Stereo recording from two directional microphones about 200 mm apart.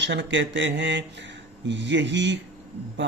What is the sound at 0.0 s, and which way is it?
Speech, 60° right (ahead or behind).